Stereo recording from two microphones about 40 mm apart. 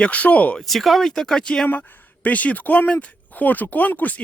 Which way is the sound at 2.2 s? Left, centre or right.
Left.